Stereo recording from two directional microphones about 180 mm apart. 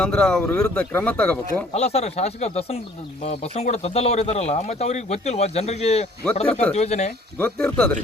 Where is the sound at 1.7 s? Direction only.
35° left (ahead or behind).